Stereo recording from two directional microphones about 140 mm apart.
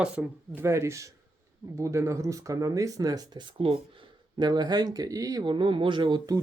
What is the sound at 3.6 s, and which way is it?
Speech, 40° right (ahead or behind).